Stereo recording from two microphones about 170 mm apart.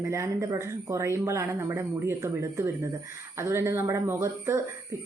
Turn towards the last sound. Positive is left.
turn(degrees=-15)  # may be behind; listen again after turning